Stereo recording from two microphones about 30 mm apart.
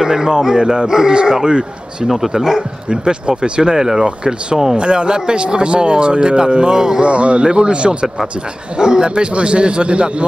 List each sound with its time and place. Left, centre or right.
0.0 s speech: centre
1.5 s speech: right
2.0 s speech: centre
2.9 s speech: right
3.7 s speech: centre
4.0 s speech: right
7.0 s speech: right
8.7 s speech: right